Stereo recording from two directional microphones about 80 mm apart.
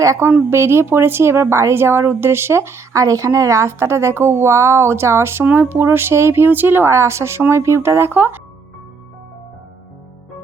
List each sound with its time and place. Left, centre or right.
0.0 s a woman's voice: right